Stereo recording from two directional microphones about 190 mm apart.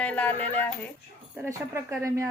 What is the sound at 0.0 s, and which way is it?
Speech, 5° left (ahead or behind).